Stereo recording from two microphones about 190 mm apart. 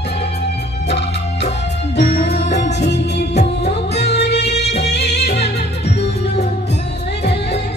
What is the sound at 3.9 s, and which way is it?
Music, 60° left (ahead or behind).